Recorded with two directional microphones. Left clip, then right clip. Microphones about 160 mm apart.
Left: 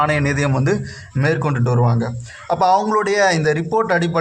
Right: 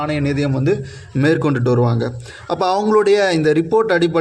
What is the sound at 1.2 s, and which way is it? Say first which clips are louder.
Speech: right 3 dB; 40° right (ahead or behind).